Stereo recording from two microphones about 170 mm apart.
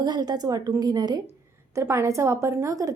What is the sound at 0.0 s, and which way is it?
A woman's voice, 25° right (ahead or behind).